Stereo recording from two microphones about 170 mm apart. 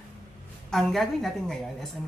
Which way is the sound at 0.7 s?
Centre (ahead or behind).